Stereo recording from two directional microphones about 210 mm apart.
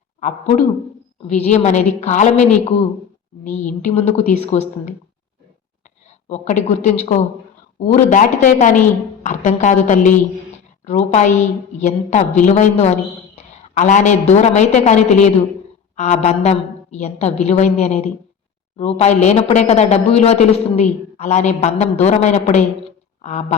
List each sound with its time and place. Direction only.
0.2 s a woman's voice: 35° left (ahead or behind)
3.6 s a woman's voice: 35° left (ahead or behind)
6.2 s a woman's voice: 35° left (ahead or behind)